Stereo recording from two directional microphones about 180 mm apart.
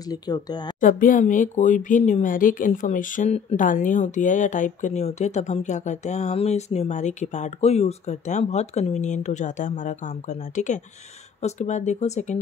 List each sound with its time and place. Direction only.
0.1 s a woman's voice: 20° left (ahead or behind)
0.7 s speech: 50° left (ahead or behind)